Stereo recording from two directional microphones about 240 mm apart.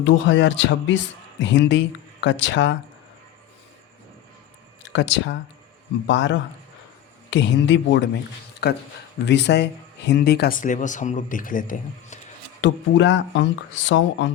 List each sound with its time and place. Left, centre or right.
0.0 s speech: left
4.8 s speech: left
12.6 s speech: left